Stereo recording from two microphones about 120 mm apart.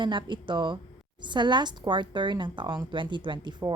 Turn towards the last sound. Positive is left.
turn(degrees=-40)  # may be behind; listen again after turning